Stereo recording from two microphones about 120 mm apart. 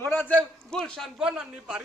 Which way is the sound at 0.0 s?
20° left (ahead or behind).